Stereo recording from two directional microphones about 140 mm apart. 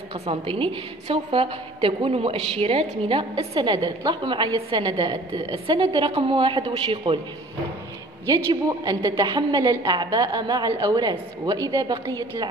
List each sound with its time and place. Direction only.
0.1 s a woman's voice: 45° right (ahead or behind)
8.3 s a woman's voice: 25° right (ahead or behind)